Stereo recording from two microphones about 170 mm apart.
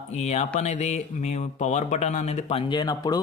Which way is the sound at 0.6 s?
45° left (ahead or behind).